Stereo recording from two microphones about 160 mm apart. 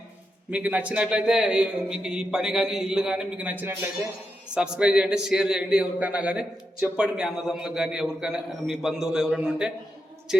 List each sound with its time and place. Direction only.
0.5 s a man's voice: 10° right (ahead or behind)